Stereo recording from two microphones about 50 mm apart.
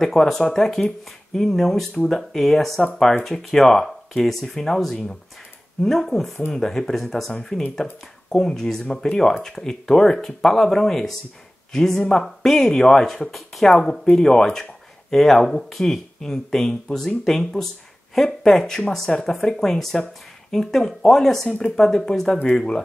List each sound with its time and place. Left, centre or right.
0.0 s speech: centre
21.5 s speech: left
21.7 s speech: centre